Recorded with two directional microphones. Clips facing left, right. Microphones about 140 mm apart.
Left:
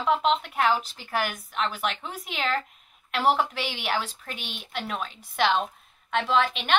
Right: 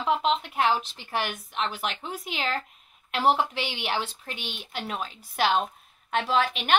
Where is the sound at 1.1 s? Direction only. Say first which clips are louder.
Left 1 dB; 30° right (ahead or behind).